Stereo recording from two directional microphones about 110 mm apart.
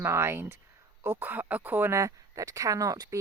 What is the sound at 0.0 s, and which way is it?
Speech, 20° right (ahead or behind).